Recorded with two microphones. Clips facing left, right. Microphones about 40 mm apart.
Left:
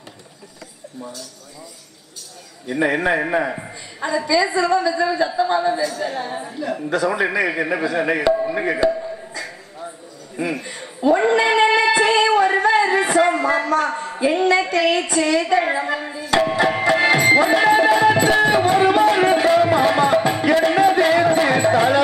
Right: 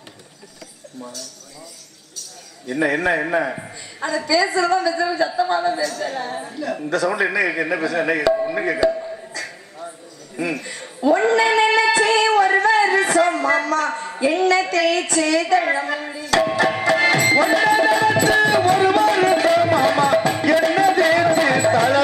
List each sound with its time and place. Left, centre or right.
2.1 s a man's voice: centre
4.0 s a woman's voice: centre
8.3 s speech: centre
8.6 s a sound: left
13.9 s a sound: centre
14.2 s a woman's voice: centre
16.2 s music: centre